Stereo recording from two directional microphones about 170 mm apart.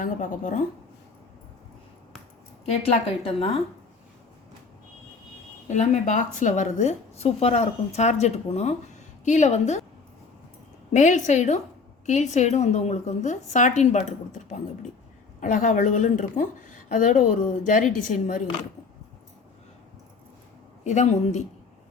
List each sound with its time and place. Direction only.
0.0 s a woman's voice: 50° left (ahead or behind)
2.8 s a woman's voice: 35° left (ahead or behind)
5.6 s a woman's voice: 45° left (ahead or behind)
10.9 s a woman's voice: 45° left (ahead or behind)
20.8 s a woman's voice: 40° left (ahead or behind)